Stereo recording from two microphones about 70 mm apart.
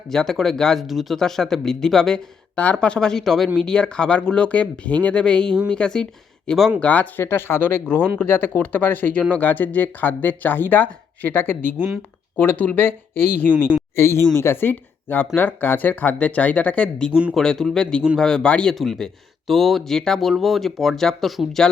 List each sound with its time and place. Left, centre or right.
0.1 s speech: centre
7.2 s speech: left; by 17.1 s centre
17.1 s speech: centre
17.3 s speech: centre
18.7 s speech: centre